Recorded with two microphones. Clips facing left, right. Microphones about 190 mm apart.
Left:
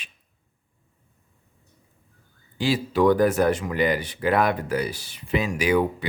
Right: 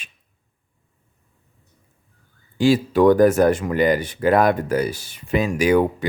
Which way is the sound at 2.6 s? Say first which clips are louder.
Right 6 dB; 50° right (ahead or behind).